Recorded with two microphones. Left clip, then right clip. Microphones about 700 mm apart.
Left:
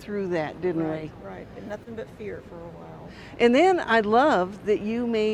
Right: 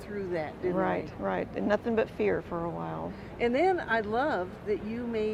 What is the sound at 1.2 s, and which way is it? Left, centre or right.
Speech, right.